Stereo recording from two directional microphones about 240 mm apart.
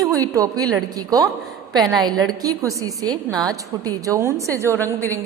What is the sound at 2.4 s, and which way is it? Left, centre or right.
A woman's voice, centre.